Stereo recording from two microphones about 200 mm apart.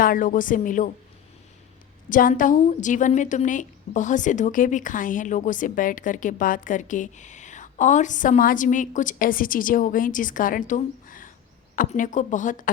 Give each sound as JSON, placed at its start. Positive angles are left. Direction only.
{"t": 0.0, "sound": "a woman's voice", "side_deg": 45}
{"t": 2.0, "sound": "a woman's voice", "side_deg": 40}